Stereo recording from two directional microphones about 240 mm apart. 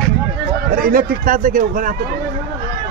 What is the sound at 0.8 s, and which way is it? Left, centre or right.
A man's voice, right.